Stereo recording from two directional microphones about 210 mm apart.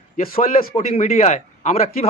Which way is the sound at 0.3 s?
30° left (ahead or behind).